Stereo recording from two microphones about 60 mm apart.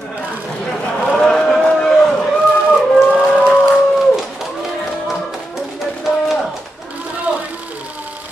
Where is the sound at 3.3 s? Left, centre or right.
Centre.